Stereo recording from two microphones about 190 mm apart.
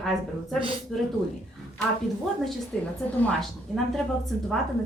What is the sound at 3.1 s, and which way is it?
Speech, 5° left (ahead or behind).